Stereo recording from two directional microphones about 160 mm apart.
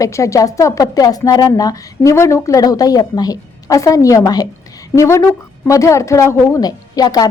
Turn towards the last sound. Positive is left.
turn(degrees=25)  # may be behind; listen again after turning